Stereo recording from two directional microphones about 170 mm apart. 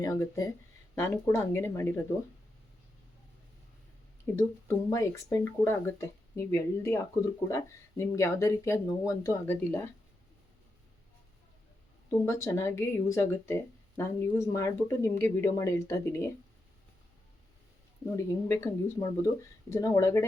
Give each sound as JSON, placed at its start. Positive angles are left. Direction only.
{"t": 0.0, "sound": "speech", "side_deg": 20}
{"t": 4.4, "sound": "speech", "side_deg": 20}
{"t": 12.2, "sound": "speech", "side_deg": 15}
{"t": 18.2, "sound": "speech", "side_deg": 15}